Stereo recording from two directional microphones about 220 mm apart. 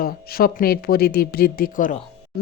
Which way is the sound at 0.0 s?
40° left (ahead or behind).